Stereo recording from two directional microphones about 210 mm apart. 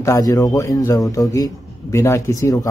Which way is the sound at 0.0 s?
15° left (ahead or behind).